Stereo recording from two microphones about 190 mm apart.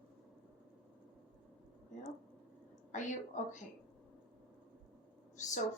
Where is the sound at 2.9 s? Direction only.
40° left (ahead or behind).